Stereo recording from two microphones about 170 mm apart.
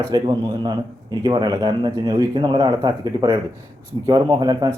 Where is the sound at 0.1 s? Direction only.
25° right (ahead or behind).